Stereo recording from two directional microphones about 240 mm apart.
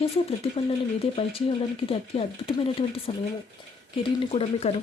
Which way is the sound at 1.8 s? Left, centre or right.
Left.